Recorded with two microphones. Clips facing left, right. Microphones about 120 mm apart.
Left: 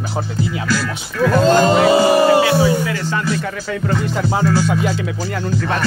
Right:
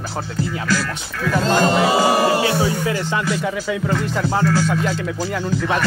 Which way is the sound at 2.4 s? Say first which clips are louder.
Left 4 dB; 25° right (ahead or behind).